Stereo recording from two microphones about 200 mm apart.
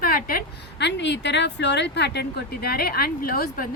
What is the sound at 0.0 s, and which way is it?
A woman's voice, 45° left (ahead or behind).